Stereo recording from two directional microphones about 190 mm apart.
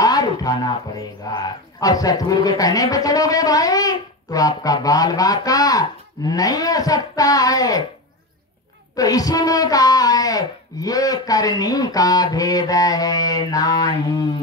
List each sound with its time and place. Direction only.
0.0 s a sound: 20° left (ahead or behind)
1.3 s a man's voice: 20° left (ahead or behind)
8.9 s a man's voice: 20° left (ahead or behind)